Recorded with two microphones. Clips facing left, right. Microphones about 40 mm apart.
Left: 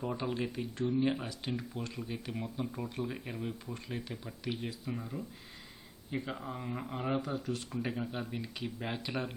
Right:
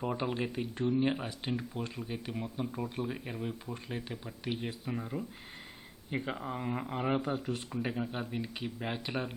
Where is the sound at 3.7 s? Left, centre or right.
Centre.